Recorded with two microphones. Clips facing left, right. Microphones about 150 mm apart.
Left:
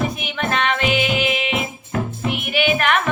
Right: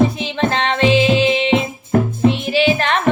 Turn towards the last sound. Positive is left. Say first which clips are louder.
# right 3 dB
turn(degrees=-30)  # may be behind; listen again after turning